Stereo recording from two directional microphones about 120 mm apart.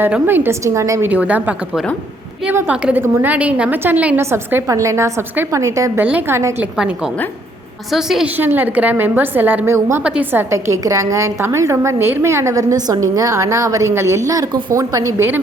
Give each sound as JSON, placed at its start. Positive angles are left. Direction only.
{"t": 0.0, "sound": "a woman's voice", "side_deg": -15}
{"t": 1.0, "sound": "a woman's voice", "side_deg": -10}
{"t": 6.7, "sound": "a woman's voice", "side_deg": -5}
{"t": 8.4, "sound": "a woman's voice", "side_deg": -15}
{"t": 10.5, "sound": "a woman's voice", "side_deg": -25}